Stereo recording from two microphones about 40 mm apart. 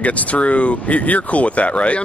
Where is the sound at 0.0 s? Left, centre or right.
Left.